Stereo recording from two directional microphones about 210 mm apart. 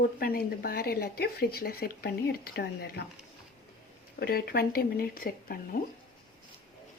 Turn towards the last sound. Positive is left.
turn(degrees=45)  # may be behind; listen again after turning